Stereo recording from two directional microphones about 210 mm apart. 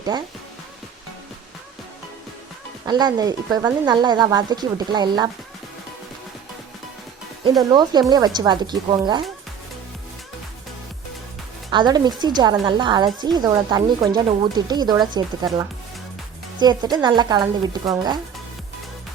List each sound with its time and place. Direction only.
2.8 s speech: 20° right (ahead or behind)
7.7 s speech: 20° right (ahead or behind)
11.7 s speech: 20° right (ahead or behind)
16.6 s speech: 20° right (ahead or behind)